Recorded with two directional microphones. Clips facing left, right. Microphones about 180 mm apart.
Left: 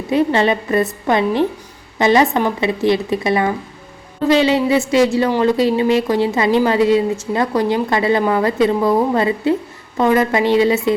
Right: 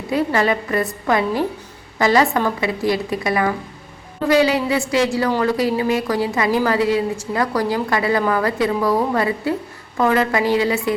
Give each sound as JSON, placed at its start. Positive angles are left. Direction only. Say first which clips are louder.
{"t": 0.1, "sound": "a woman's voice", "louder": "left 3 dB", "side_deg": 25}